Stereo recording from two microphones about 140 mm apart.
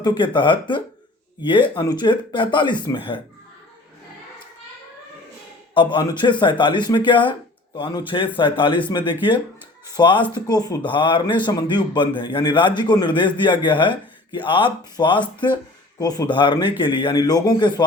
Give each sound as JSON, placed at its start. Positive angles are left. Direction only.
{"t": 0.0, "sound": "speech", "side_deg": 35}
{"t": 5.7, "sound": "speech", "side_deg": 35}